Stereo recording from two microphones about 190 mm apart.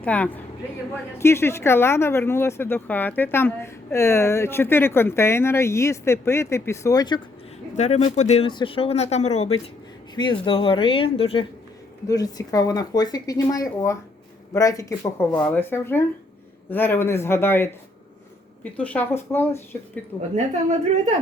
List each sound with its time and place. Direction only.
0.0 s speech: 10° left (ahead or behind)
7.8 s speech: 35° left (ahead or behind)
12.0 s speech: 20° left (ahead or behind)
15.3 s speech: 5° left (ahead or behind)